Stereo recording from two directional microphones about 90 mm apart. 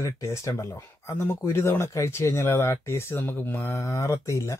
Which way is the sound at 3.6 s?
35° left (ahead or behind).